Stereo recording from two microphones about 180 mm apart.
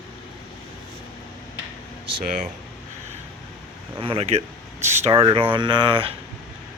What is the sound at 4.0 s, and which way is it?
Speech, 30° right (ahead or behind).